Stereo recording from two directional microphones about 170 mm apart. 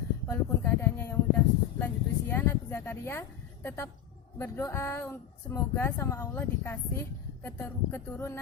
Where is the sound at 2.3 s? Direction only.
15° left (ahead or behind).